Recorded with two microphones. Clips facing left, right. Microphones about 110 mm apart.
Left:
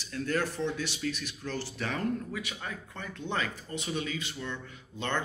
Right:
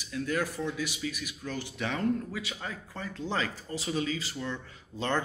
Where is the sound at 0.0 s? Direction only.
10° right (ahead or behind).